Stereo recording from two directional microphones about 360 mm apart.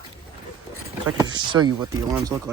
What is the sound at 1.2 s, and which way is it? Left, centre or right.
Speech, centre.